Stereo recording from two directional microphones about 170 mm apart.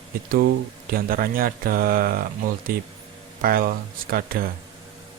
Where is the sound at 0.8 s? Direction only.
60° right (ahead or behind).